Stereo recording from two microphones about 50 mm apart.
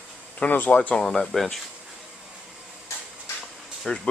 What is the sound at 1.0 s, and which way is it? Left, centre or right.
Speech, centre.